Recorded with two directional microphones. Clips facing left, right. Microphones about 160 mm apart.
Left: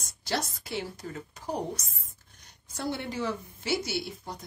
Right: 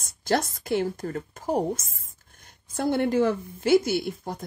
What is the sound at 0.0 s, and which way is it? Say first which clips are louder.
A child's voice: right 7 dB; 50° right (ahead or behind).